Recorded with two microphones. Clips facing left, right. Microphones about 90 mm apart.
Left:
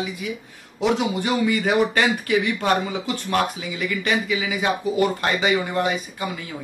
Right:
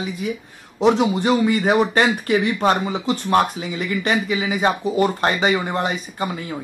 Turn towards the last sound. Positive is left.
turn(degrees=-35)  # may be behind; listen again after turning